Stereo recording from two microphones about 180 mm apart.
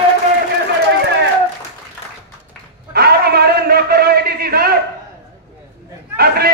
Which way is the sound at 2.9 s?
60° right (ahead or behind).